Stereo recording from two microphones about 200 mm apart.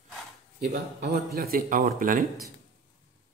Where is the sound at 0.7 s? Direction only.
55° right (ahead or behind).